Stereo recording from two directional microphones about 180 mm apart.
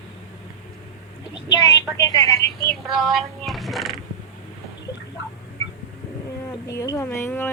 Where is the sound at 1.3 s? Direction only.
20° left (ahead or behind).